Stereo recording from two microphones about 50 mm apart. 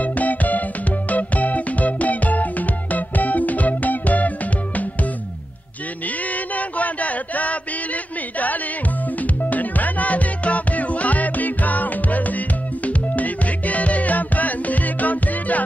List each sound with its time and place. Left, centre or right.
0.0 s music: left
6.3 s a sound: left
9.2 s music: left